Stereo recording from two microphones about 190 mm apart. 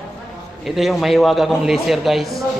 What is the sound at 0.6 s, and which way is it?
A man's voice, centre (ahead or behind).